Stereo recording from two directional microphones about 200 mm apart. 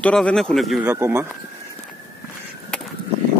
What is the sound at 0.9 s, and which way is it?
Speech, 10° right (ahead or behind).